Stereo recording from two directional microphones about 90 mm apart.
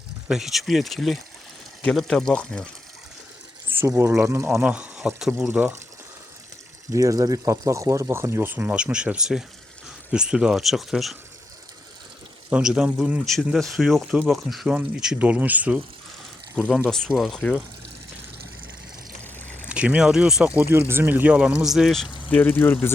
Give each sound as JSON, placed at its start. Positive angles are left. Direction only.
{"t": 0.3, "sound": "speech", "side_deg": -5}
{"t": 3.7, "sound": "speech", "side_deg": -25}
{"t": 4.6, "sound": "speech", "side_deg": -15}
{"t": 6.9, "sound": "speech", "side_deg": -40}
{"t": 12.5, "sound": "speech", "side_deg": -10}
{"t": 13.2, "sound": "speech", "side_deg": 0}
{"t": 15.0, "sound": "speech", "side_deg": -15}
{"t": 17.1, "sound": "speech", "side_deg": 0}
{"t": 19.6, "sound": "speech", "side_deg": -15}
{"t": 20.6, "sound": "speech", "side_deg": -25}
{"t": 22.3, "sound": "speech", "side_deg": 20}